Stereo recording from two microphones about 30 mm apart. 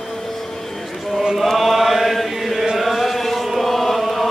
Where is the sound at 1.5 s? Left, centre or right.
Centre.